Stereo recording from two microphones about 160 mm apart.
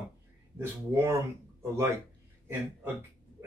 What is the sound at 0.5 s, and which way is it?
Speech, 15° right (ahead or behind).